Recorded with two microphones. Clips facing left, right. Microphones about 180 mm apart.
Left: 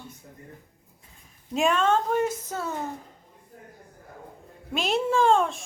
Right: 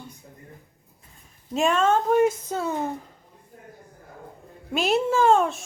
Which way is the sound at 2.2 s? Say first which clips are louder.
Right 6 dB; 15° right (ahead or behind).